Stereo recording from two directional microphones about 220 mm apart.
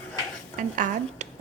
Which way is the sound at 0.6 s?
35° right (ahead or behind).